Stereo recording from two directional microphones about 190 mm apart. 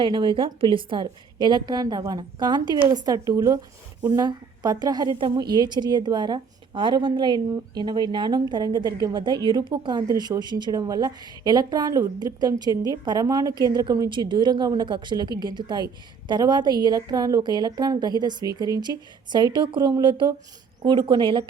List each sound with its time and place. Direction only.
0.0 s a woman's voice: 25° right (ahead or behind)